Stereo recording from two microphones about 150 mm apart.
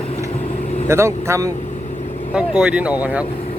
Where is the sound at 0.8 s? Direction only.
20° right (ahead or behind).